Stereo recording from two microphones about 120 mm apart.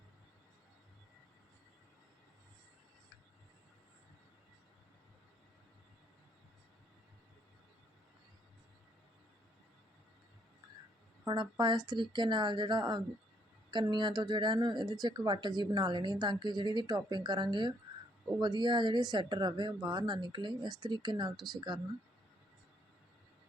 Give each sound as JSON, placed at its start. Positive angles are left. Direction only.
{"t": 11.3, "sound": "a woman's voice", "side_deg": -40}